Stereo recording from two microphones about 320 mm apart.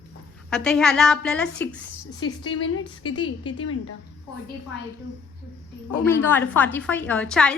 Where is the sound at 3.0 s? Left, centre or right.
Centre.